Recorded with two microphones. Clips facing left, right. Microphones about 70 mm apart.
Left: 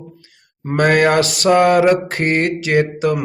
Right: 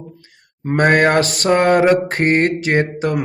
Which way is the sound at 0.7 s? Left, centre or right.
Right.